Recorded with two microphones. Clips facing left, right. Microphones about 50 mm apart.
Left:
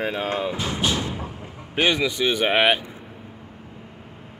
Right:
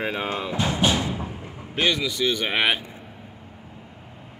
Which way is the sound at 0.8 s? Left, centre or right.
Centre.